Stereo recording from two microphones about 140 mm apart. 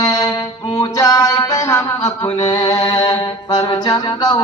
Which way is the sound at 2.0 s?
45° left (ahead or behind).